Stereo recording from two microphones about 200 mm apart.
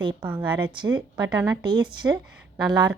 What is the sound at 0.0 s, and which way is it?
Speech, 25° right (ahead or behind).